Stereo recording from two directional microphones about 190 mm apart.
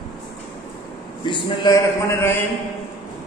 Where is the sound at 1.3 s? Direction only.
20° left (ahead or behind).